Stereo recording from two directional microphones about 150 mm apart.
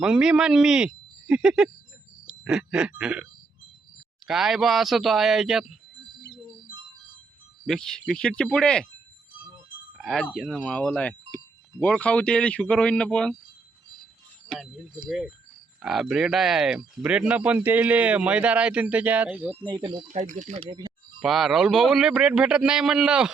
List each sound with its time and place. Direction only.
0.0 s a man's voice: 5° right (ahead or behind)
2.2 s a sound: 5° right (ahead or behind)
4.3 s a man's voice: centre (ahead or behind)
7.6 s a man's voice: centre (ahead or behind)
10.0 s speech: centre (ahead or behind)
14.5 s a man's voice: 5° left (ahead or behind)
19.6 s speech: 30° right (ahead or behind)
20.1 s speech: 55° right (ahead or behind)
20.6 s speech: 35° right (ahead or behind)
21.2 s a man's voice: centre (ahead or behind)